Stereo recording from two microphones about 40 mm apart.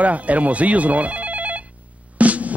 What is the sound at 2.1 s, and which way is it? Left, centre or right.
Music, right.